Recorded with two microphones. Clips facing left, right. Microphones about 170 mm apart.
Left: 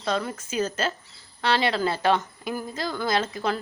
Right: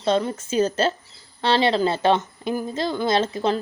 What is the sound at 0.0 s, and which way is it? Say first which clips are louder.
A woman's voice: right 6 dB; 25° right (ahead or behind).